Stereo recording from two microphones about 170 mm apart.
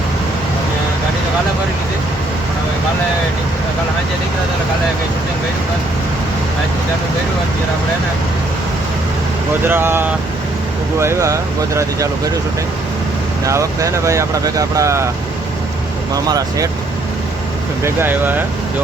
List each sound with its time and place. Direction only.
9.6 s speech: 15° right (ahead or behind)
13.4 s speech: 20° right (ahead or behind)
17.8 s speech: 10° right (ahead or behind)